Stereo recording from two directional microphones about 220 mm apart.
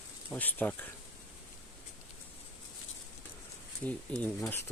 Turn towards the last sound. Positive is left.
turn(degrees=10)  # may be behind; listen again after turning